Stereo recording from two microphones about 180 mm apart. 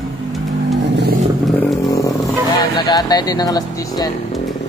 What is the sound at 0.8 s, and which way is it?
Vehicle, 70° right (ahead or behind).